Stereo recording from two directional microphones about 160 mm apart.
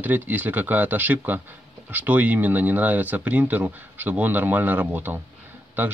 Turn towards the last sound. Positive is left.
turn(degrees=-10)  # may be behind; listen again after turning